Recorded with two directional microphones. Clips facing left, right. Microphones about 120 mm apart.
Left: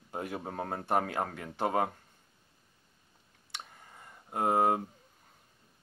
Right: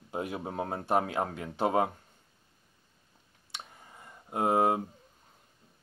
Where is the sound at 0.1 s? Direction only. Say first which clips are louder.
Right 2 dB; 15° right (ahead or behind).